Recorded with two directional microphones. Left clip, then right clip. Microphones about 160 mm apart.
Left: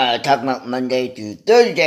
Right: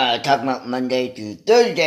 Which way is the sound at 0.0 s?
10° left (ahead or behind).